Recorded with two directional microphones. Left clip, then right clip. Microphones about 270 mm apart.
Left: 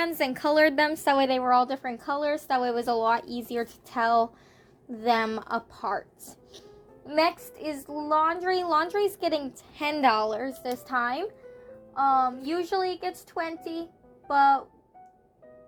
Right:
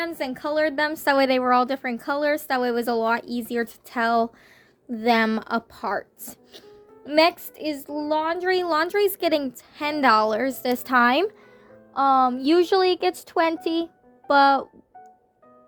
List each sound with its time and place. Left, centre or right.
0.0 s a woman's voice: centre; by 9.5 s right
9.7 s a woman's voice: centre
10.2 s a woman's voice: right